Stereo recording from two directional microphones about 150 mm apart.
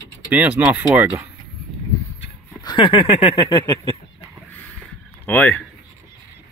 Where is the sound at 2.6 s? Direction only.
35° left (ahead or behind).